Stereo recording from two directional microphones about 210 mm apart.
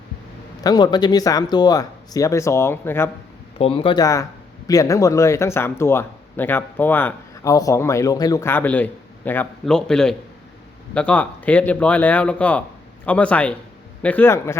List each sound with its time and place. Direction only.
0.6 s speech: 20° left (ahead or behind)
3.6 s speech: 25° left (ahead or behind)